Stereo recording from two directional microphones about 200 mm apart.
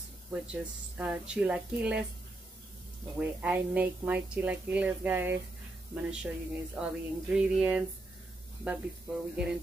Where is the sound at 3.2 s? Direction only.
10° right (ahead or behind).